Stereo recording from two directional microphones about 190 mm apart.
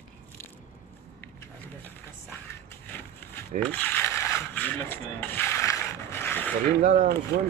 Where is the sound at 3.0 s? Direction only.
10° left (ahead or behind).